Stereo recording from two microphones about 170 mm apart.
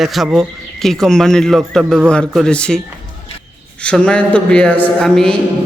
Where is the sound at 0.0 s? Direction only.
Centre (ahead or behind).